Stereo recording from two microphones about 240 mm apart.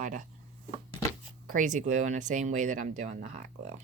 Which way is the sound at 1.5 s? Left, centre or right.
Right.